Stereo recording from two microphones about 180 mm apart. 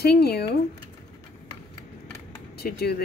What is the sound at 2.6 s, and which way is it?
Speech, 60° left (ahead or behind).